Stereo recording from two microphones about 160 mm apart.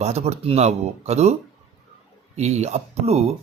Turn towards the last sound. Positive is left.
turn(degrees=-40)  # may be behind; listen again after turning